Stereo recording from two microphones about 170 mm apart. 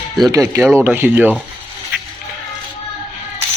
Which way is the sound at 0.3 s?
20° right (ahead or behind).